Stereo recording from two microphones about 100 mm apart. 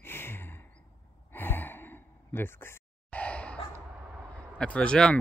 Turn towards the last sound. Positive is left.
turn(degrees=10)  # may be behind; listen again after turning